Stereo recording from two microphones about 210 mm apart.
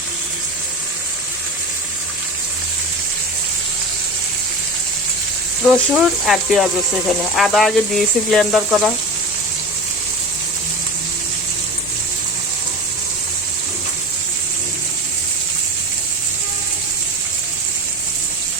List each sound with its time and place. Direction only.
5.7 s speech: centre (ahead or behind)